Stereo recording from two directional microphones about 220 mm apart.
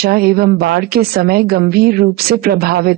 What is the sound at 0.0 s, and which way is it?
Speech, 45° right (ahead or behind).